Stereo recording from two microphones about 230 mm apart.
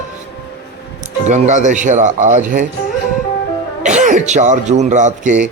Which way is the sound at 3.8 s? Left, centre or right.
Right.